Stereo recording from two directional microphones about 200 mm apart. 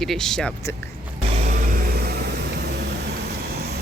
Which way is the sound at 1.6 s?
40° right (ahead or behind).